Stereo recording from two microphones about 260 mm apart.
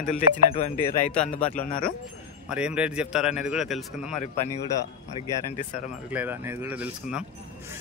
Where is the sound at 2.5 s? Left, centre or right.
Centre.